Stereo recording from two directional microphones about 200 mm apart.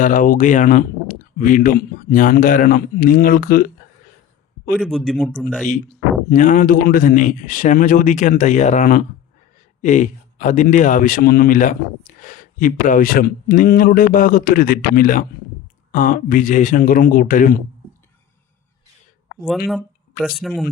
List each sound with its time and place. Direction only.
0.0 s speech: 40° left (ahead or behind)
4.8 s speech: centre (ahead or behind)
6.3 s speech: 40° left (ahead or behind)
19.4 s speech: centre (ahead or behind)